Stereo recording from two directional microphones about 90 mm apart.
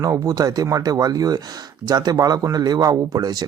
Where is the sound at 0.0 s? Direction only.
40° right (ahead or behind).